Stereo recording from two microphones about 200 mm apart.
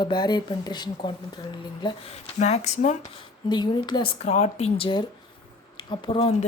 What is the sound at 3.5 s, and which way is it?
Speech, 20° left (ahead or behind).